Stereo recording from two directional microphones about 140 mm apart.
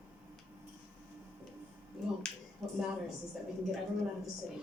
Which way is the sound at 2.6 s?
Centre (ahead or behind).